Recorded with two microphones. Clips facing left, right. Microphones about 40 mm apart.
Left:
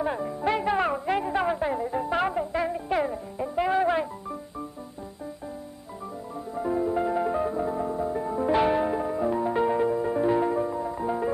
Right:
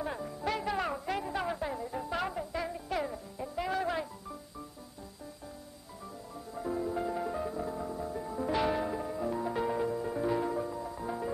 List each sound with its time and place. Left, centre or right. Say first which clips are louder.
0.0 s music: left 8 dB; left
6.5 s music: left 8 dB; left